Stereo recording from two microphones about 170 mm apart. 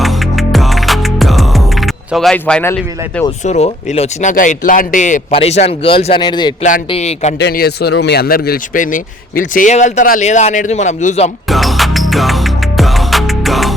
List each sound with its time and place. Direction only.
0.0 s music: centre (ahead or behind)
3.4 s speech: 40° left (ahead or behind); by 6.5 s 25° left (ahead or behind)
6.6 s speech: 50° left (ahead or behind)
7.3 s speech: 80° left; by 11.3 s 45° left (ahead or behind)
11.4 s music: centre (ahead or behind)